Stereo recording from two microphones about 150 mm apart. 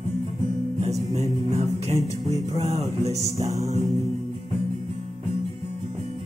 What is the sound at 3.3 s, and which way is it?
Music, 25° right (ahead or behind).